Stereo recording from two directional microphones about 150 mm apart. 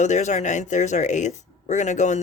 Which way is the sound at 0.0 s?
50° left (ahead or behind).